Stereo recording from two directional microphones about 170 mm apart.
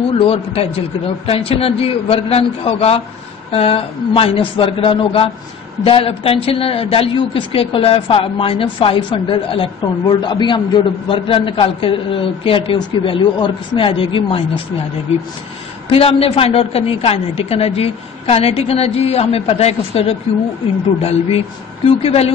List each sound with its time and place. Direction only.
0.2 s speech: 35° left (ahead or behind)